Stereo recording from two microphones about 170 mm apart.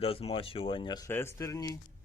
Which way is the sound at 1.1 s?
15° left (ahead or behind).